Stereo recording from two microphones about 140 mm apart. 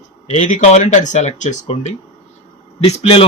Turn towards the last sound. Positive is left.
turn(degrees=45)  # may be behind; listen again after turning